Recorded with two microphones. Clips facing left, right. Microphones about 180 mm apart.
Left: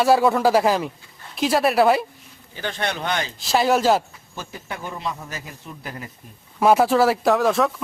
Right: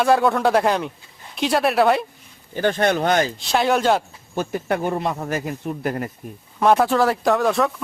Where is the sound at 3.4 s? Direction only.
Centre (ahead or behind).